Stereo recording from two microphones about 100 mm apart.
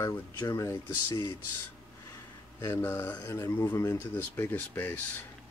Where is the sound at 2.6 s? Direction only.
25° left (ahead or behind).